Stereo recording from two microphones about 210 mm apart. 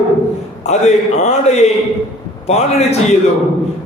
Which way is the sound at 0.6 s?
35° left (ahead or behind).